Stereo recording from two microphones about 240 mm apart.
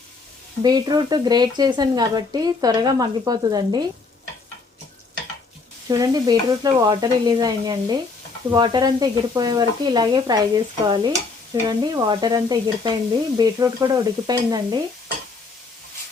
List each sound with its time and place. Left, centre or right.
0.6 s speech: centre
5.9 s speech: centre